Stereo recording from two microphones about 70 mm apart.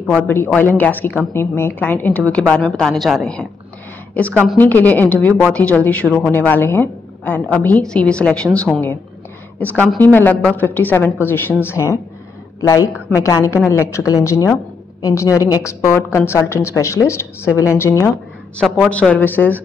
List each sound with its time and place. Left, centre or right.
0.2 s a woman's voice: left
2.6 s a woman's voice: centre
4.1 s a woman's voice: left
9.9 s a woman's voice: left
12.5 s a woman's voice: left
15.6 s speech: left
18.6 s a woman's voice: centre